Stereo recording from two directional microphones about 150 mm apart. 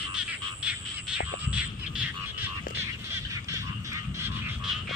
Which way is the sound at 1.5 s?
10° right (ahead or behind).